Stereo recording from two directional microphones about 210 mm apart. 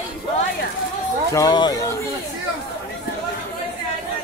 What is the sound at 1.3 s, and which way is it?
Speech, 20° left (ahead or behind).